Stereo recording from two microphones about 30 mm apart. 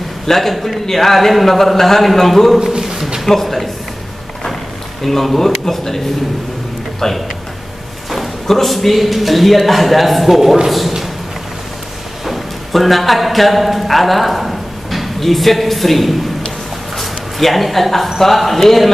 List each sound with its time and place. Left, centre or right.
0.3 s speech: centre
2.6 s a sound: right
3.3 s speech: centre
5.0 s speech: centre
8.5 s a man's voice: centre
12.3 s a man's voice: centre
16.9 s a sound: centre
18.2 s a man's voice: centre